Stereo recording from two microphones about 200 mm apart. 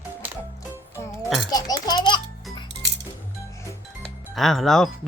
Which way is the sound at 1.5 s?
20° left (ahead or behind).